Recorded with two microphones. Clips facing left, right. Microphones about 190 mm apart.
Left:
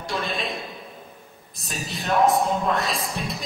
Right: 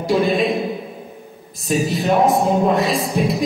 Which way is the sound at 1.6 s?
Centre (ahead or behind).